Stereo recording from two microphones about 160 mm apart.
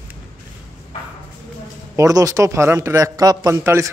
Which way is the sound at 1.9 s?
20° right (ahead or behind).